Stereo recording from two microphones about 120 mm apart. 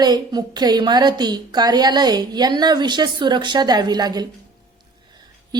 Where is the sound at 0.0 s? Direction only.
35° right (ahead or behind).